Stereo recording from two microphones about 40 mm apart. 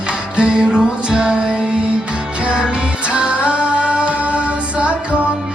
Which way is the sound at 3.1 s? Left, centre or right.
Right.